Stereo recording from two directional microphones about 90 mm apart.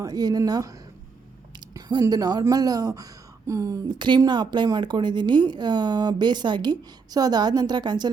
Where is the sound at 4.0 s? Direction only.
60° right (ahead or behind).